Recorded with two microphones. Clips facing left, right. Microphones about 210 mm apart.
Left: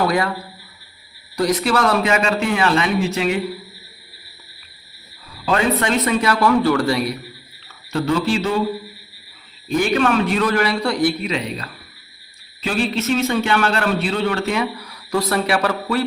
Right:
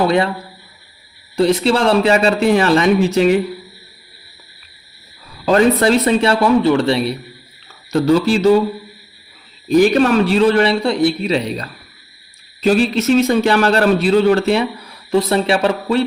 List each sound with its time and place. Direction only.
0.0 s a man's voice: 25° right (ahead or behind)
1.4 s a man's voice: 25° right (ahead or behind)
5.5 s a man's voice: 35° right (ahead or behind)
9.6 s a man's voice: 40° right (ahead or behind)